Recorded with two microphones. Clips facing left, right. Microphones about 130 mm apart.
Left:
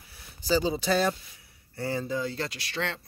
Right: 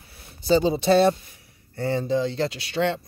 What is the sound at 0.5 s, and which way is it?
Speech, 25° right (ahead or behind).